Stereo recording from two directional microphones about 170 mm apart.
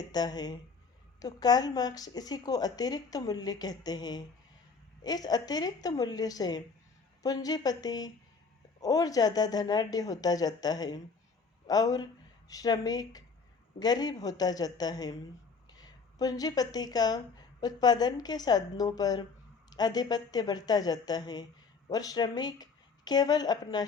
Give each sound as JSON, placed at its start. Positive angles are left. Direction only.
{"t": 0.0, "sound": "speech", "side_deg": 25}